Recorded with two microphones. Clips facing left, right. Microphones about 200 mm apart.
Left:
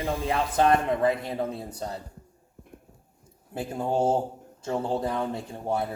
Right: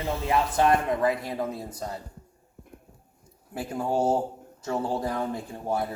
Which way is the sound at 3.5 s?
25° left (ahead or behind).